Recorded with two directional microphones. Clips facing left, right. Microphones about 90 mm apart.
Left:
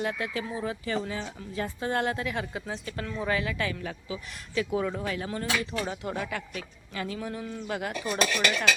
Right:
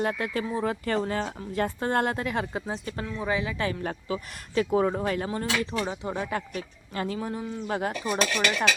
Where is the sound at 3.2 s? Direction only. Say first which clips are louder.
Right 1 dB; 20° right (ahead or behind).